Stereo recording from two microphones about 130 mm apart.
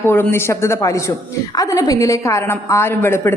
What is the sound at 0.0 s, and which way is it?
A woman's voice, 15° left (ahead or behind).